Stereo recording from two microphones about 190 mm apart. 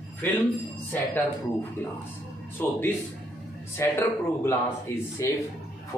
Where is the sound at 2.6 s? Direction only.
10° left (ahead or behind).